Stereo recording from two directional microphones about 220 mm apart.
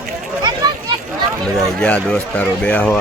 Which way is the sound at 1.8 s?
5° left (ahead or behind).